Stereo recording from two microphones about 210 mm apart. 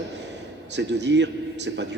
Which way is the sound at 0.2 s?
55° right (ahead or behind).